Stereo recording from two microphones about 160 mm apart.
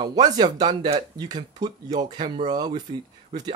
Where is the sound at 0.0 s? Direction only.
25° right (ahead or behind).